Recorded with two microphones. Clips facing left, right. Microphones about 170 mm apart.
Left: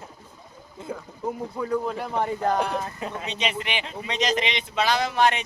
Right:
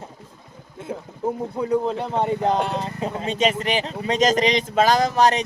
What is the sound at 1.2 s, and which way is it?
Speech, 25° right (ahead or behind).